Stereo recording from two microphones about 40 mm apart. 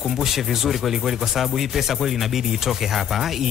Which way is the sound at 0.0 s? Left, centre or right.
Centre.